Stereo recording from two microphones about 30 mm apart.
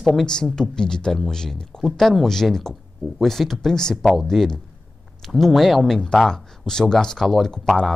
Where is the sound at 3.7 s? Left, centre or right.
Left.